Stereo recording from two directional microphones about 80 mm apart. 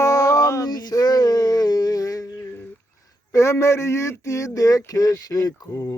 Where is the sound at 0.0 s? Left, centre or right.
Left.